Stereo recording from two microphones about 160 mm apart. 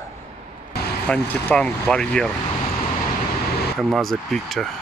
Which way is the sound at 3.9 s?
Centre (ahead or behind).